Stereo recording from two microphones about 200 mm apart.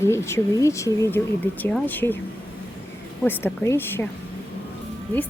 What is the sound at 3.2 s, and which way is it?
Speech, 10° left (ahead or behind).